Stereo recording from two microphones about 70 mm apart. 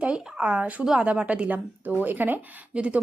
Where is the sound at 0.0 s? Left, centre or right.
Centre.